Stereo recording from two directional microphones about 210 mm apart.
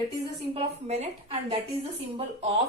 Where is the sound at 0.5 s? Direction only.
30° right (ahead or behind).